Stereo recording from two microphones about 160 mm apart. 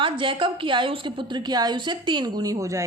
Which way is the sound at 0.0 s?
30° right (ahead or behind).